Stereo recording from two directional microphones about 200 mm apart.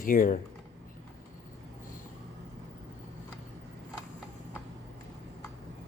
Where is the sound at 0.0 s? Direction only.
45° left (ahead or behind).